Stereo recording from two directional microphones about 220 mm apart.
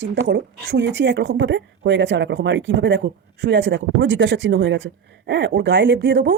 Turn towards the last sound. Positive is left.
turn(degrees=-55)  # may be behind; listen again after turning